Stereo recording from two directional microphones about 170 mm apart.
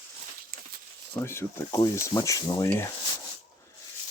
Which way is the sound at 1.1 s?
15° left (ahead or behind).